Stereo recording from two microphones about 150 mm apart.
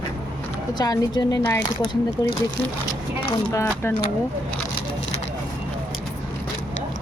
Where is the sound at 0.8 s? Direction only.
25° left (ahead or behind).